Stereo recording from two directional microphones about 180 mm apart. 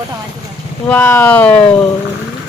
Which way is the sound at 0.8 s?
10° left (ahead or behind).